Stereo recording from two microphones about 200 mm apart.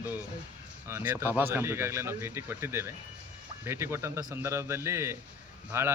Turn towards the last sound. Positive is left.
turn(degrees=-10)  # may be behind; listen again after turning